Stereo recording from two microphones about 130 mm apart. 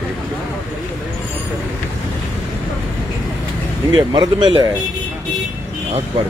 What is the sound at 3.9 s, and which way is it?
Speech, 40° right (ahead or behind).